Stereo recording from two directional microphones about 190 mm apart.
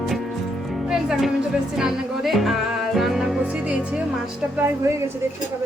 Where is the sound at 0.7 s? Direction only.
5° right (ahead or behind).